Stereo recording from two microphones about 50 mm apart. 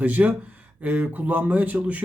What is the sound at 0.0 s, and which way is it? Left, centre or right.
Speech, right.